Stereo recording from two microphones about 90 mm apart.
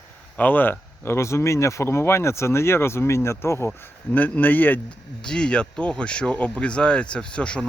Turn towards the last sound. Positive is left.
turn(degrees=10)  # may be behind; listen again after turning